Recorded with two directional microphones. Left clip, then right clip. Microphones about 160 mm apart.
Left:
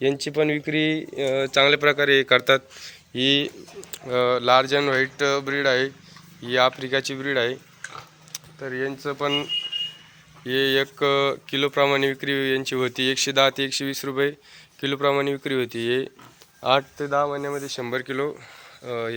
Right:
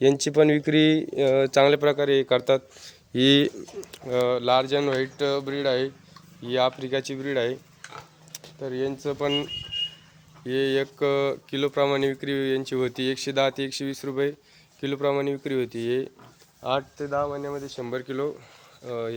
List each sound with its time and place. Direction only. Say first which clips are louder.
0.0 s speech: right 3 dB; 45° right (ahead or behind)
1.6 s speech: left 1 dB; 35° right (ahead or behind)
1.9 s speech: left 4 dB; 15° right (ahead or behind)
3.1 s speech: right 1 dB; 60° right (ahead or behind)
4.0 s speech: left 3 dB; 15° right (ahead or behind)
8.3 s speech: left 1 dB; 25° right (ahead or behind)
10.4 s speech: left 3 dB; 5° right (ahead or behind)
16.6 s speech: left 6 dB; 20° left (ahead or behind); by 19.1 s centre (ahead or behind)